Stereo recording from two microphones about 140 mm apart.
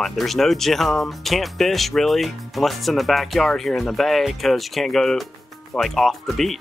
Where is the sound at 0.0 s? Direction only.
Centre (ahead or behind).